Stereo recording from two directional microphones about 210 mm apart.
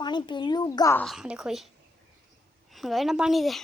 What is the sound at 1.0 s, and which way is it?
Speech, centre (ahead or behind).